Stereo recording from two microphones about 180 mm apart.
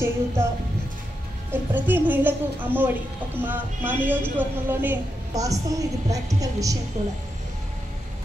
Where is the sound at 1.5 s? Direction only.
10° right (ahead or behind).